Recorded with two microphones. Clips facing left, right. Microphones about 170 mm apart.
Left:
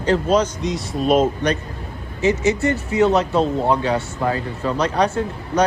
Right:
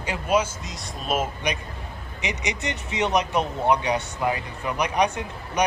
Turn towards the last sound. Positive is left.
turn(degrees=-15)  # may be behind; listen again after turning